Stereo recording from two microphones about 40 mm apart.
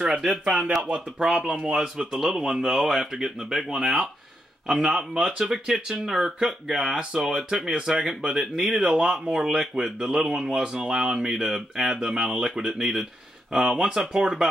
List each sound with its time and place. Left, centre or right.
0.0 s speech: centre
0.3 s speech: right
1.2 s speech: centre
2.0 s speech: centre
3.0 s speech: centre
6.9 s speech: right